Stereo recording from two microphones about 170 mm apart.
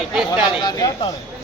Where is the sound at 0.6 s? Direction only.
20° left (ahead or behind).